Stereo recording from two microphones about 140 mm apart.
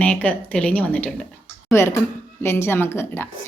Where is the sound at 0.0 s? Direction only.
10° left (ahead or behind).